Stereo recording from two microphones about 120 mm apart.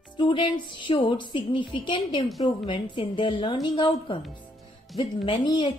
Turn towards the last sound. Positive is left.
turn(degrees=45)  # may be behind; listen again after turning